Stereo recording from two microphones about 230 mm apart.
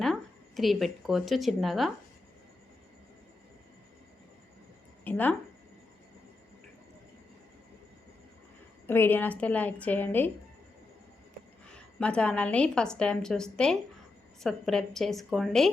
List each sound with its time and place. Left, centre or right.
0.0 s a woman's voice: centre
5.0 s a woman's voice: centre
8.9 s a woman's voice: centre
11.9 s a woman's voice: centre